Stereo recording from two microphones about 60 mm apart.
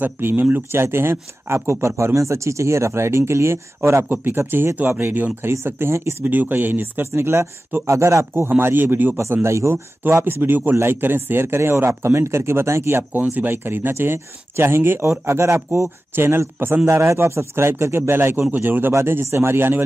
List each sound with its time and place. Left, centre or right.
0.0 s speech: right
0.7 s speech: right
4.1 s speech: right
5.4 s speech: right
6.2 s speech: right
8.5 s speech: right
9.4 s speech: right
10.0 s speech: right
13.1 s speech: right
18.9 s speech: right